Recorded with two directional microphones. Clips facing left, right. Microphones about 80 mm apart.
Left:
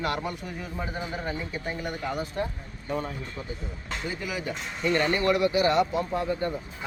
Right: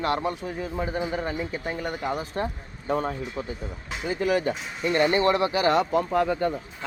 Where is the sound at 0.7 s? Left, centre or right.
Right.